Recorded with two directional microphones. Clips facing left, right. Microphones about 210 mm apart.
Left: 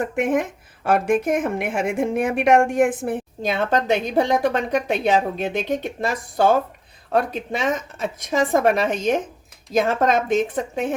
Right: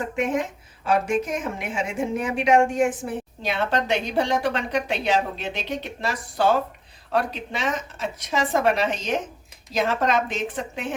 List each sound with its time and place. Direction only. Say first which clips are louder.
0.0 s a woman's voice: left 4 dB; 55° left (ahead or behind)